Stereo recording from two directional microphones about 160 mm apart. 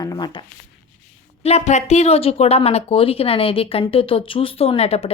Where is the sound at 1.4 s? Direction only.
45° left (ahead or behind).